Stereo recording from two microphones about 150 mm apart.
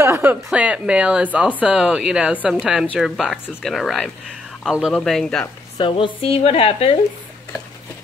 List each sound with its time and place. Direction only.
0.0 s speech: 15° right (ahead or behind); by 5.5 s 5° left (ahead or behind)
5.8 s a woman's voice: 35° left (ahead or behind)